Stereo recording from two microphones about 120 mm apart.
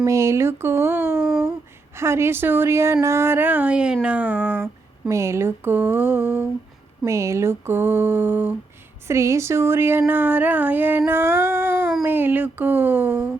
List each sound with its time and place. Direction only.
0.0 s speech: 25° right (ahead or behind)
9.0 s speech: 25° right (ahead or behind)